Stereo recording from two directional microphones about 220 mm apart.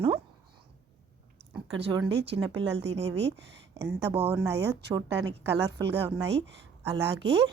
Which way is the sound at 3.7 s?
10° right (ahead or behind).